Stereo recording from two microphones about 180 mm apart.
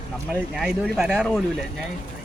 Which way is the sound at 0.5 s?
Centre (ahead or behind).